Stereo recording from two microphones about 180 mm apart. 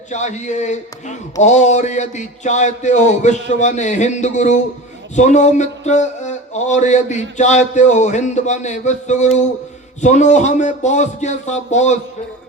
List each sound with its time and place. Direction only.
0.1 s mantra: 40° left (ahead or behind)